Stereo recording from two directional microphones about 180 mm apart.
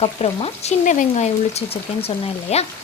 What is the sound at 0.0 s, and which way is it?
Speech, 35° left (ahead or behind).